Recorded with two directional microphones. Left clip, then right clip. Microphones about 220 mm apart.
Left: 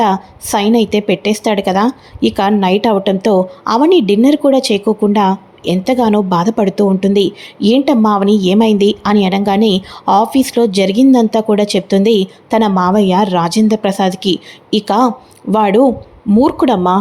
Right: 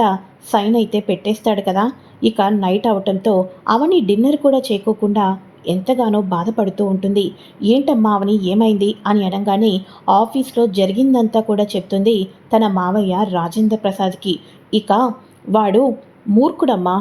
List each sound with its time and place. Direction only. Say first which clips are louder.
0.0 s a woman's voice: left 3 dB; 20° left (ahead or behind)